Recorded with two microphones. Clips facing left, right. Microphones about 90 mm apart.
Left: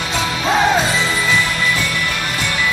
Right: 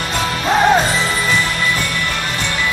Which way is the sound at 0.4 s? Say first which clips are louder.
Right 1 dB; centre (ahead or behind).